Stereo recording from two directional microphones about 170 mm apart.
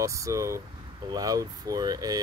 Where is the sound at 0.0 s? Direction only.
20° right (ahead or behind).